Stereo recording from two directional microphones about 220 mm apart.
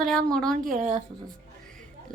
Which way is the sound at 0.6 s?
35° right (ahead or behind).